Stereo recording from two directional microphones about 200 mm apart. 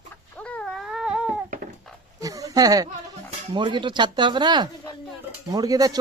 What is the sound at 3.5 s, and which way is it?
Speech, 25° right (ahead or behind).